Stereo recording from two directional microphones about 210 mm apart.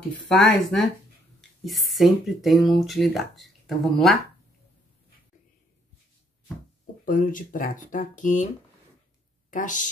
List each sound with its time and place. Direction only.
0.4 s speech: centre (ahead or behind)
7.1 s speech: 40° left (ahead or behind)
9.5 s speech: 40° left (ahead or behind)